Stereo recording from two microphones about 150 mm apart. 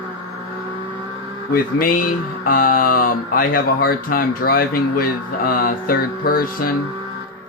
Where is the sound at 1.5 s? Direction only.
70° left (ahead or behind).